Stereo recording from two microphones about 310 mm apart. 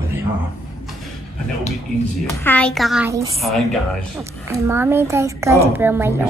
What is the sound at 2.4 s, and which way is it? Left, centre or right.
A woman's voice, centre.